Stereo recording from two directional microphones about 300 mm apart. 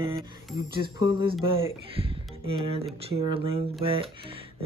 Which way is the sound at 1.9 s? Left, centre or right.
Centre.